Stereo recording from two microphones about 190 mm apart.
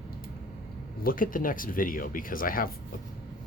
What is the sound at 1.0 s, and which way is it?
Speech, 45° left (ahead or behind).